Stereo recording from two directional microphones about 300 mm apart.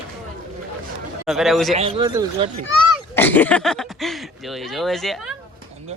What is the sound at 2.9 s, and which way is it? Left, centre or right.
Speech, centre.